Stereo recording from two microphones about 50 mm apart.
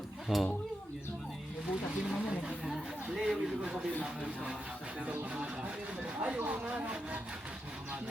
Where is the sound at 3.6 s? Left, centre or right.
Centre.